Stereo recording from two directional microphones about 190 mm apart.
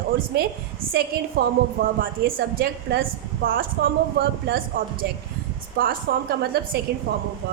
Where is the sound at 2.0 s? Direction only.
55° right (ahead or behind).